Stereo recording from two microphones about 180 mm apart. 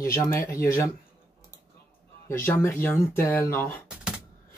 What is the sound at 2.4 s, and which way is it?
Speech, 10° left (ahead or behind).